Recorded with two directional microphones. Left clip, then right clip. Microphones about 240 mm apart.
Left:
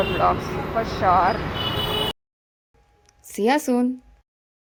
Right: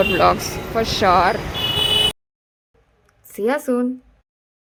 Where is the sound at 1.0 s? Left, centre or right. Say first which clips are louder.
Right 3 dB; right.